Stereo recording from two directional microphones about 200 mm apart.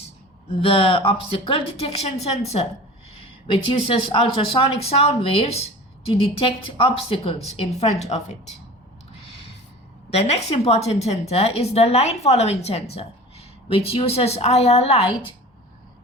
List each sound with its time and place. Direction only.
0.0 s speech: 30° left (ahead or behind)
10.1 s a woman's voice: 30° left (ahead or behind)